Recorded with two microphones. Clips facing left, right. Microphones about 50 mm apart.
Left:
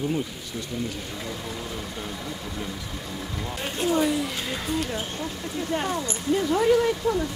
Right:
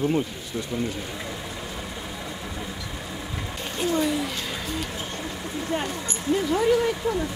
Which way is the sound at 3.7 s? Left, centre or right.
Centre.